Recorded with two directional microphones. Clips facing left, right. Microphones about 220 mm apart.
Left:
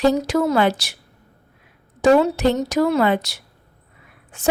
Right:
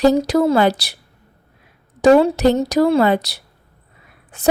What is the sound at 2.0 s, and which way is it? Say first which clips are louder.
A woman's voice: right 3 dB; 40° right (ahead or behind).